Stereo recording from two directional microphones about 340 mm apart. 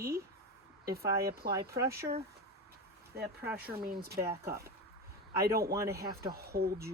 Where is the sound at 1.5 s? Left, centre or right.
Centre.